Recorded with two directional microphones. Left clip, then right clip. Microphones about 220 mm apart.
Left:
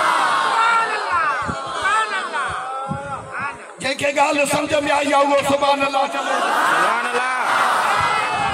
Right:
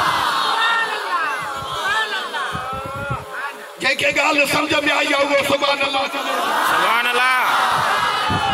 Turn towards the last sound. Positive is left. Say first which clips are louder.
# right 3 dB
turn(degrees=10)  # may be behind; listen again after turning